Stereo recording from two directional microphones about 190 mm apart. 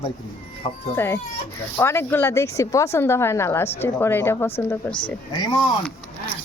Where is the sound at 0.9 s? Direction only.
10° left (ahead or behind).